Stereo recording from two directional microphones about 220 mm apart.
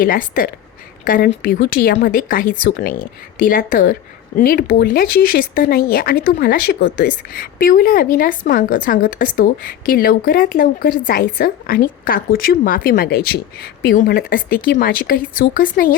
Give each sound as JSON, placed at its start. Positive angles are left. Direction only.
{"t": 0.0, "sound": "speech", "side_deg": 40}